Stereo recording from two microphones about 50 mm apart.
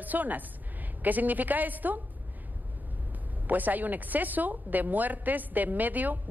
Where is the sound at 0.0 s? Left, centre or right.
Right.